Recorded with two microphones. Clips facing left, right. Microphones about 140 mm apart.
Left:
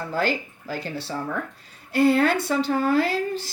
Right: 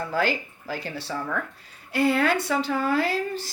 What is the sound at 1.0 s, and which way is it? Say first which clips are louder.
Speech: left 1 dB; 30° left (ahead or behind).